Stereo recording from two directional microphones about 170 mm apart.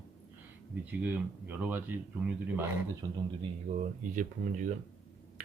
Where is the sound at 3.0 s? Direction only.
20° right (ahead or behind).